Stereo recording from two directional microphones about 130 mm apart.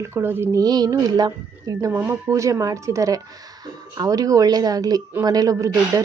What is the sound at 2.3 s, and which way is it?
Speech, 25° right (ahead or behind).